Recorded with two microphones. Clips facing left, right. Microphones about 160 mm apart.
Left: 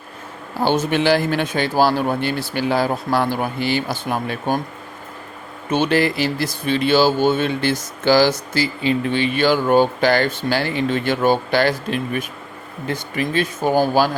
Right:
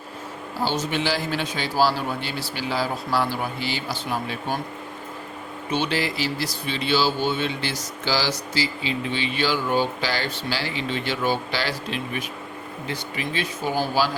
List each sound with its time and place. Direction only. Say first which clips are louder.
0.6 s speech: left 7 dB; 55° left (ahead or behind)
5.7 s speech: left 7 dB; 50° left (ahead or behind)